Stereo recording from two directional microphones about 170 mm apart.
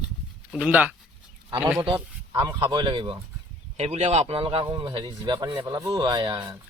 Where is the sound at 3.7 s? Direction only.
40° right (ahead or behind).